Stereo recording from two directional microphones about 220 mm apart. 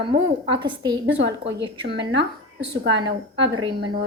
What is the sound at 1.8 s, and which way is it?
Speech, 50° right (ahead or behind).